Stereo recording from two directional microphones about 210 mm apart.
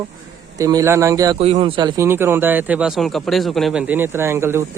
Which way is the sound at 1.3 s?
30° right (ahead or behind).